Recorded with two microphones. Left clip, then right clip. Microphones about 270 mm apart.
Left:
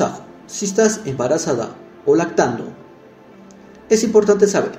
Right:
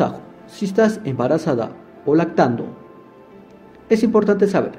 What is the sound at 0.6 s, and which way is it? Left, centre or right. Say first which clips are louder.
A man's voice: left 1 dB; right.